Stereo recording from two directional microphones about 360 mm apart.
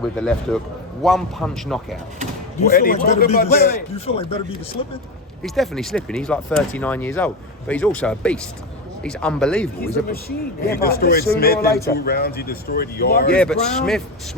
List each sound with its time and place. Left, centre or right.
0.0 s speech: centre
2.7 s a man's voice: left
5.4 s speech: centre
9.8 s a man's voice: left
13.3 s speech: centre